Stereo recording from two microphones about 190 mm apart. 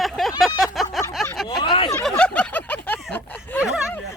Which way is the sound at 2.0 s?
5° left (ahead or behind).